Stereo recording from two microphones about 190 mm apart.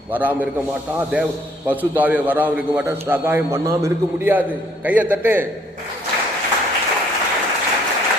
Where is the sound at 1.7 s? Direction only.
10° right (ahead or behind).